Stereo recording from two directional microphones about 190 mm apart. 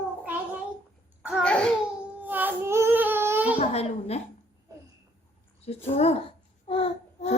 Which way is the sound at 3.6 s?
35° left (ahead or behind).